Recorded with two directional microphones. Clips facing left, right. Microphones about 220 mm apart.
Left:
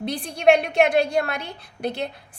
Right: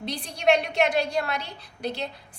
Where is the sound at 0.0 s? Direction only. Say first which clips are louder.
Left 6 dB; 55° left (ahead or behind).